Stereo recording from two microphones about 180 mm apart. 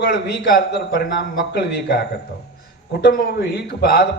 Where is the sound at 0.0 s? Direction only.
55° left (ahead or behind).